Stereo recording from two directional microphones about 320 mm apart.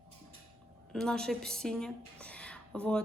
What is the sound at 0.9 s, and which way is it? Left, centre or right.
A woman's voice, centre.